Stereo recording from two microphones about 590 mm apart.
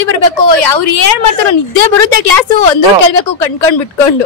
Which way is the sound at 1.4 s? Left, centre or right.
Left.